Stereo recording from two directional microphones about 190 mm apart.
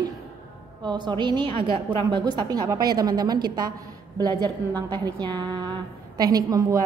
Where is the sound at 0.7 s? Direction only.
25° right (ahead or behind).